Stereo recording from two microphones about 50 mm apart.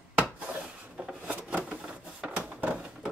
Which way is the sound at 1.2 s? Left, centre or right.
Right.